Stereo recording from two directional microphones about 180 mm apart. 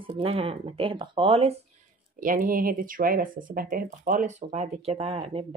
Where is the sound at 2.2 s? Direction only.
50° right (ahead or behind); by 5.4 s 35° right (ahead or behind).